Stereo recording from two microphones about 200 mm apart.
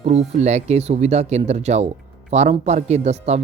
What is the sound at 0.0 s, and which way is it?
Speech, 35° right (ahead or behind).